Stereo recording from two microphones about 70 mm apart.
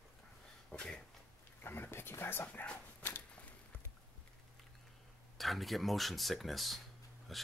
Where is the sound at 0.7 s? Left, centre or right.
Centre.